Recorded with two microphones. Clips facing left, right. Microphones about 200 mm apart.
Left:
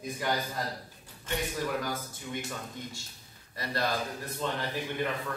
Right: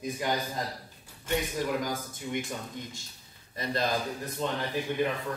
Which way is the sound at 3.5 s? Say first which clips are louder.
Right 2 dB; 20° right (ahead or behind).